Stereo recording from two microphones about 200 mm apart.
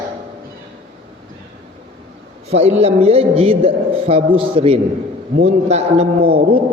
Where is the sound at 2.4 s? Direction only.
30° right (ahead or behind).